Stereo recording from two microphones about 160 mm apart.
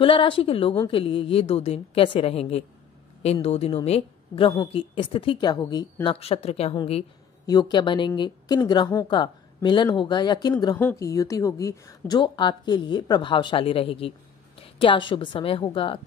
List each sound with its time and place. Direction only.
0.0 s a woman's voice: 35° left (ahead or behind)
6.1 s a woman's voice: 40° left (ahead or behind)
7.4 s a woman's voice: 25° left (ahead or behind)
10.8 s a woman's voice: 15° left (ahead or behind); by 16.1 s 35° left (ahead or behind)